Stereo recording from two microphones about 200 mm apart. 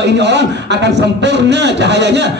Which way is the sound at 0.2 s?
60° right (ahead or behind).